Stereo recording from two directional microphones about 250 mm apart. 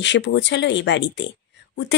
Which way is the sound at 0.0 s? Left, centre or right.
Left.